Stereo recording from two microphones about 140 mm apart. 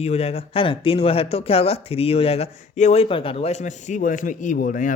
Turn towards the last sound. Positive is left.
turn(degrees=70)  # may be behind; listen again after turning